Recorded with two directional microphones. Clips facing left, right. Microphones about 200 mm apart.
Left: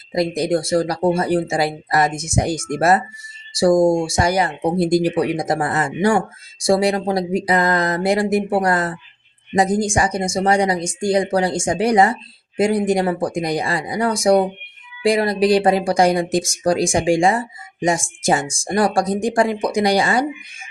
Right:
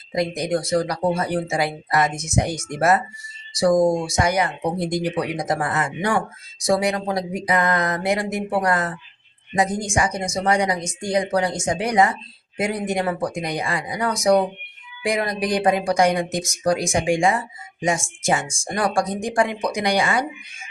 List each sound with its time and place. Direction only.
0.1 s speech: 35° left (ahead or behind)